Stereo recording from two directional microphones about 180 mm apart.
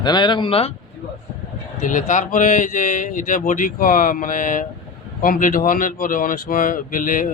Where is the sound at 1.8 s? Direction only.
45° left (ahead or behind).